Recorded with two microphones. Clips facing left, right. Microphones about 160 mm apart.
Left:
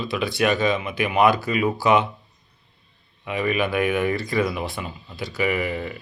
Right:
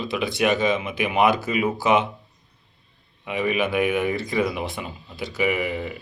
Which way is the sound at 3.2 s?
20° right (ahead or behind).